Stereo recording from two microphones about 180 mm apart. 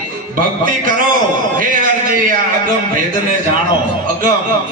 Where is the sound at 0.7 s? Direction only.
50° right (ahead or behind).